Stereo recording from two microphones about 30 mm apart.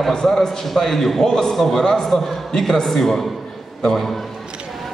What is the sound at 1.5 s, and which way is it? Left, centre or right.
A man's voice, centre.